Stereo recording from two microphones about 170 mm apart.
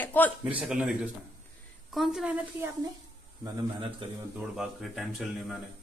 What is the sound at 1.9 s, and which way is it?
Speech, centre (ahead or behind).